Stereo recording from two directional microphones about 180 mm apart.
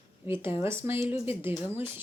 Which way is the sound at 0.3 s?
10° right (ahead or behind).